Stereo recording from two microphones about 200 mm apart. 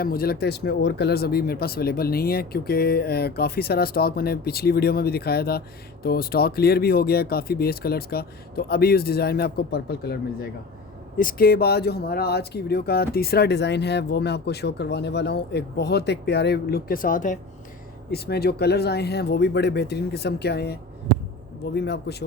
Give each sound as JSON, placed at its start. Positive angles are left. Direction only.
{"t": 0.0, "sound": "speech", "side_deg": 50}
{"t": 18.1, "sound": "speech", "side_deg": 55}
{"t": 21.8, "sound": "speech", "side_deg": 55}